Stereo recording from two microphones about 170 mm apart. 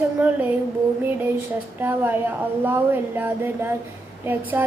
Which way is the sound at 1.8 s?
10° right (ahead or behind).